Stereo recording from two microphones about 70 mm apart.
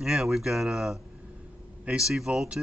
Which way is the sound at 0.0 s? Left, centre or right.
Centre.